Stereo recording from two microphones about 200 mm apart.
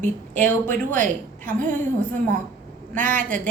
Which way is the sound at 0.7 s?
40° right (ahead or behind).